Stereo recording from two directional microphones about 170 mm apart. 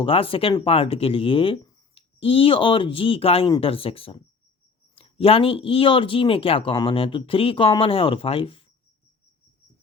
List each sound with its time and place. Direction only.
0.0 s speech: 30° left (ahead or behind)